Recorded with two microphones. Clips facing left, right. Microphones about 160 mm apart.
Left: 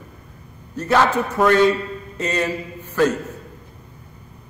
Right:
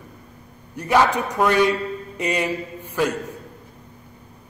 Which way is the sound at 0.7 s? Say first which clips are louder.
Left 1 dB; 15° right (ahead or behind).